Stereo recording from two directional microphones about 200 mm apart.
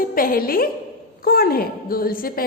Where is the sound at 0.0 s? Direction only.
45° left (ahead or behind).